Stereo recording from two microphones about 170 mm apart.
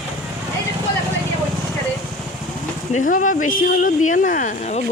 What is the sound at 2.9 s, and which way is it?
Speech, 50° left (ahead or behind).